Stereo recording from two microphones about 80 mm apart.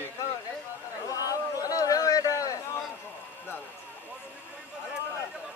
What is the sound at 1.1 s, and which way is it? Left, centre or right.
Chatter, left.